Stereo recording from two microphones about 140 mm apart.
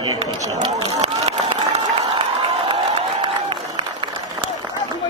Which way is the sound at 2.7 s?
40° right (ahead or behind).